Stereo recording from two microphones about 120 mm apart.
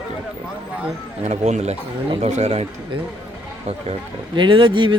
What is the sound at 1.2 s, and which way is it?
Speech, 70° right (ahead or behind).